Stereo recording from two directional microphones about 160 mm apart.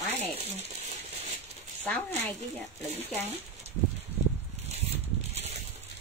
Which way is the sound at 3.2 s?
40° right (ahead or behind).